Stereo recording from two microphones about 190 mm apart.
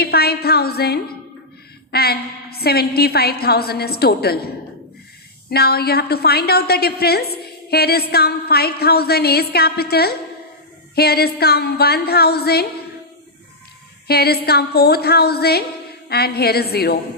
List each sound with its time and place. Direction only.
0.0 s a woman's voice: 55° left (ahead or behind)
5.5 s a woman's voice: 55° left (ahead or behind)
14.1 s a woman's voice: 55° left (ahead or behind)